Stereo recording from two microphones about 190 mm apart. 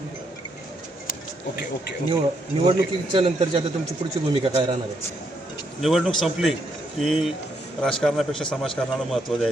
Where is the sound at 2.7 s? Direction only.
30° right (ahead or behind).